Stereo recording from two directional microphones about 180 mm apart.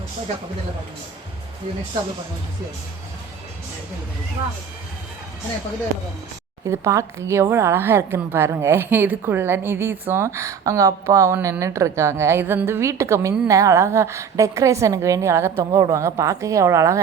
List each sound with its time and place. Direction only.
6.7 s a woman's voice: 15° right (ahead or behind)